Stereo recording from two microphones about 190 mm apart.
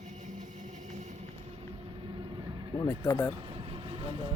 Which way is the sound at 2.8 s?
15° left (ahead or behind).